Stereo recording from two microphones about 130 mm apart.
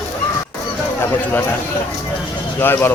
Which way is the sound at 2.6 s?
15° left (ahead or behind).